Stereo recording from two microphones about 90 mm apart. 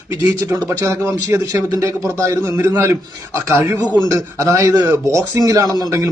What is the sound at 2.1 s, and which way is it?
Speech, 40° right (ahead or behind).